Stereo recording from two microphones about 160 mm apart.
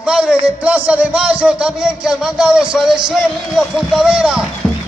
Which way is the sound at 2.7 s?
5° right (ahead or behind).